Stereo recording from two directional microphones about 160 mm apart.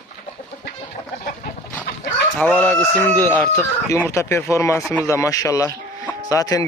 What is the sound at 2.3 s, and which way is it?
A man's voice, 10° left (ahead or behind).